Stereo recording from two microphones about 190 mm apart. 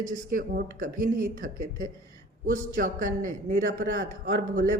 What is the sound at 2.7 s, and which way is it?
A woman's voice, 45° right (ahead or behind).